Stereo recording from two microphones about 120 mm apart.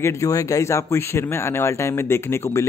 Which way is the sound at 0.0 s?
25° left (ahead or behind).